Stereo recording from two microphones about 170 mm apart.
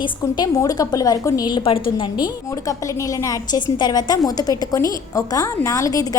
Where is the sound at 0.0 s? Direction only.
25° left (ahead or behind).